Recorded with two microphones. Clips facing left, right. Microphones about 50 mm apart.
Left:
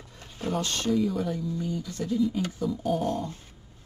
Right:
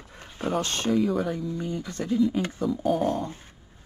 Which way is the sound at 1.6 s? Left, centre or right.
Right.